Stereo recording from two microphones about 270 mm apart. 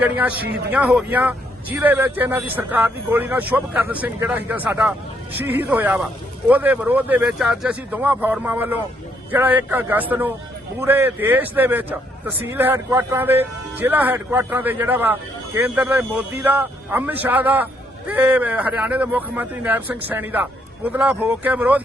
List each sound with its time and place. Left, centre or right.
0.0 s speech: centre
0.4 s speech: right
0.7 s speech: centre